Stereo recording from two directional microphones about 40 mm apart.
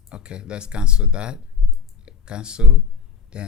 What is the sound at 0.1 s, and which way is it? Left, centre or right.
Speech, right.